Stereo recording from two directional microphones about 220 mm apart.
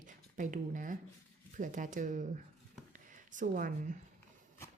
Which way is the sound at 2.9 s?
35° right (ahead or behind).